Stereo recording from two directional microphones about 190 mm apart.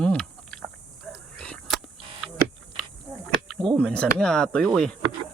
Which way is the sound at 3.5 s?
5° left (ahead or behind).